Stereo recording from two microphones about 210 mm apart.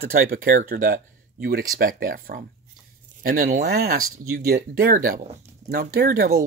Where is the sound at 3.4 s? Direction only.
50° right (ahead or behind).